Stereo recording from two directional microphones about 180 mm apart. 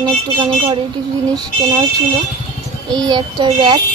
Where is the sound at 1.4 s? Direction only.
25° right (ahead or behind).